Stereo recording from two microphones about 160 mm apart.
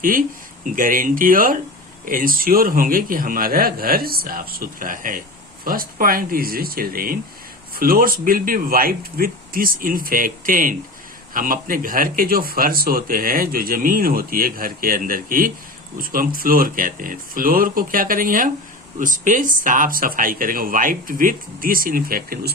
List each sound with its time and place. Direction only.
0.6 s speech: 55° right (ahead or behind)